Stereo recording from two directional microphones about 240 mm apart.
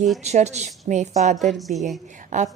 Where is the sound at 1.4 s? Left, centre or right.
Centre.